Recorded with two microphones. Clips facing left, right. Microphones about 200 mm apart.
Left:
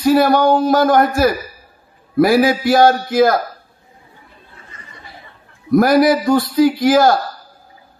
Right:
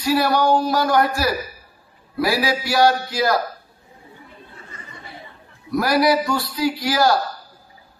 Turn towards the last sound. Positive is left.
turn(degrees=50)  # may be behind; listen again after turning